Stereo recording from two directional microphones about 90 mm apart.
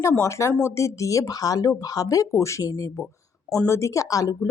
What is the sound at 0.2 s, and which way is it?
A woman's voice, 35° left (ahead or behind).